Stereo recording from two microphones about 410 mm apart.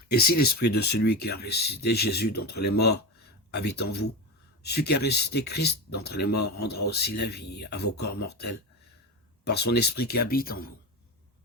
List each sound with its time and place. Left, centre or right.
0.1 s speech: left